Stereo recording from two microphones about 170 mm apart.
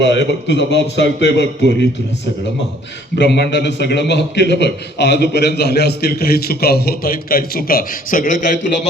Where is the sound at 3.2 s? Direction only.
80° left; by 8.3 s 55° left (ahead or behind).